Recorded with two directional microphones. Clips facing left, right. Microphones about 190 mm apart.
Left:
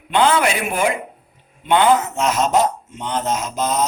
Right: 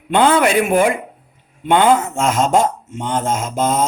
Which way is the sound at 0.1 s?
50° right (ahead or behind).